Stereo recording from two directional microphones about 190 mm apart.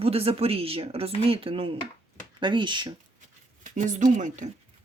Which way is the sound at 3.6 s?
40° right (ahead or behind).